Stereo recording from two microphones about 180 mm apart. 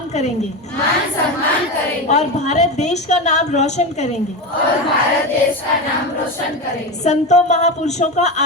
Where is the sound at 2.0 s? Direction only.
40° left (ahead or behind).